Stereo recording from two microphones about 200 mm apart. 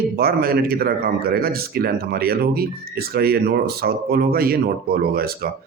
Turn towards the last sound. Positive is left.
turn(degrees=-50)  # may be behind; listen again after turning